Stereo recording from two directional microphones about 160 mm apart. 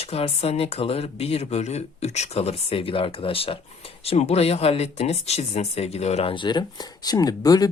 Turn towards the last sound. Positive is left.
turn(degrees=25)  # may be behind; listen again after turning